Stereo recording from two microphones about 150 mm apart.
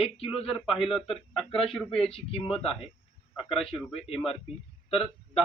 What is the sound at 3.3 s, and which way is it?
Speech, centre (ahead or behind).